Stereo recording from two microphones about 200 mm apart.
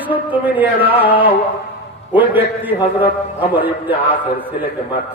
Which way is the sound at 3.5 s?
10° right (ahead or behind).